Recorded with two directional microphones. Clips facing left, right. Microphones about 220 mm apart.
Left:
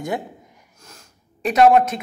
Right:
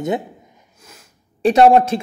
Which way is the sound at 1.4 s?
30° right (ahead or behind).